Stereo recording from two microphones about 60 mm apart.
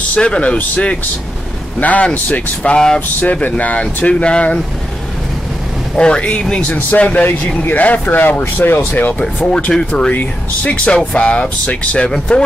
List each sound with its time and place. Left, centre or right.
0.1 s speech: centre
3.2 s speech: left
5.9 s speech: centre; by 9.1 s left
9.7 s speech: centre